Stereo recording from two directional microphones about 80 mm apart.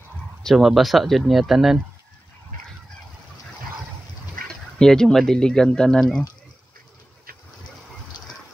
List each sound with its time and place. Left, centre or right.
0.4 s speech: centre
4.7 s speech: centre
8.2 s a sound: left